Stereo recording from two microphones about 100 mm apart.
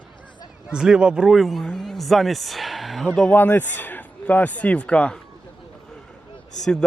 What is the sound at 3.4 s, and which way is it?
A man's voice, 20° left (ahead or behind).